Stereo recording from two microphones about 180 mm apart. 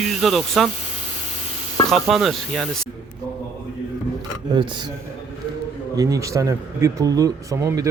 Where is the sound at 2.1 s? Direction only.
Centre (ahead or behind).